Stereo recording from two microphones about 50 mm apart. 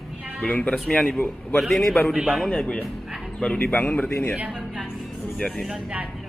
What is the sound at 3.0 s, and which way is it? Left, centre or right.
Music, centre.